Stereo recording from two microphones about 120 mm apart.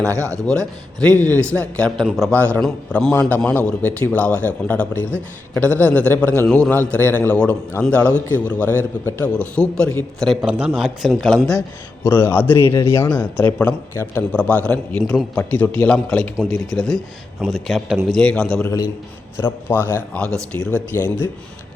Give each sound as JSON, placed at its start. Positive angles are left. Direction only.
{"t": 0.1, "sound": "speech", "side_deg": -25}
{"t": 0.4, "sound": "a man's voice", "side_deg": 5}
{"t": 2.3, "sound": "a man's voice", "side_deg": 10}
{"t": 10.4, "sound": "a man's voice", "side_deg": -5}
{"t": 12.0, "sound": "a man's voice", "side_deg": 20}
{"t": 18.6, "sound": "a man's voice", "side_deg": 25}
{"t": 19.4, "sound": "a man's voice", "side_deg": 15}